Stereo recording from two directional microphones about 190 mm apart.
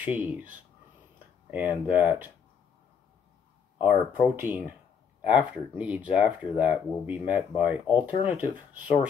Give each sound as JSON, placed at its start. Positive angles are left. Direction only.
{"t": 0.0, "sound": "speech", "side_deg": -10}
{"t": 3.7, "sound": "speech", "side_deg": -10}
{"t": 7.5, "sound": "speech", "side_deg": 25}
{"t": 8.2, "sound": "speech", "side_deg": -10}